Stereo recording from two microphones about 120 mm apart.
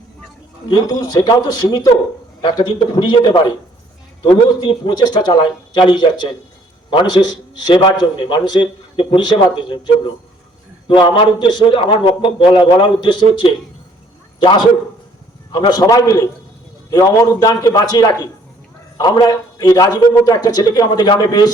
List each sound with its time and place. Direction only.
0.7 s a man's voice: 30° left (ahead or behind)
4.9 s a man's voice: 40° left (ahead or behind)
15.8 s a man's voice: 30° left (ahead or behind)